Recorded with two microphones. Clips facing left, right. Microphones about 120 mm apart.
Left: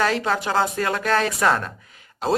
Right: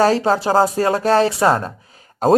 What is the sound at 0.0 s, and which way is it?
Speech, 35° right (ahead or behind).